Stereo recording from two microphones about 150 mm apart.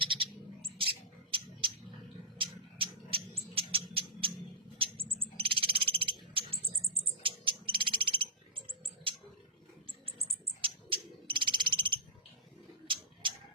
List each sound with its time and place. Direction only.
0.0 s bird: 35° right (ahead or behind)
2.4 s cat: 35° right (ahead or behind)
4.8 s mouse: 40° right (ahead or behind)
5.2 s frog: 35° right (ahead or behind)
10.2 s frog: 35° right (ahead or behind)